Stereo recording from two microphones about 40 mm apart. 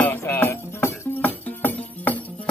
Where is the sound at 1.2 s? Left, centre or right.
Left.